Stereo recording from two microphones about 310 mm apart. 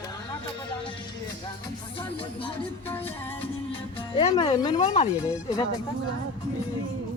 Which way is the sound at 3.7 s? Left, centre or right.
Centre.